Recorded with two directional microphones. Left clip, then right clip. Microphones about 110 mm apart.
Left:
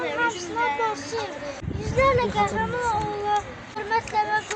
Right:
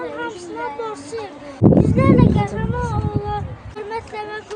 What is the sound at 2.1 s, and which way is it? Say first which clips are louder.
Speech: right 3 dB; 20° right (ahead or behind).